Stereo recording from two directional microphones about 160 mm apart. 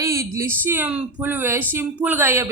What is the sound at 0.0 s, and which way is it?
Speech, 20° right (ahead or behind).